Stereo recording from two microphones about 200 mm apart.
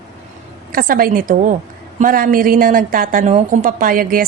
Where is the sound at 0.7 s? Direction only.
45° right (ahead or behind).